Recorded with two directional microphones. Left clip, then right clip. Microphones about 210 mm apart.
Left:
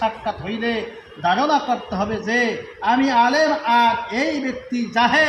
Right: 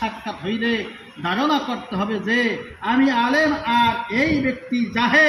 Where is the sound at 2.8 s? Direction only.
10° left (ahead or behind).